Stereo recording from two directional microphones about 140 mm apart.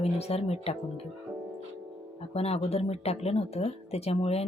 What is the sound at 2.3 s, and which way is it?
Speech, 45° left (ahead or behind).